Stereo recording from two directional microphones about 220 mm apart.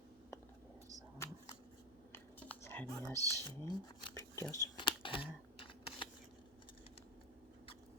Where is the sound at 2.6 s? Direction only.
10° left (ahead or behind).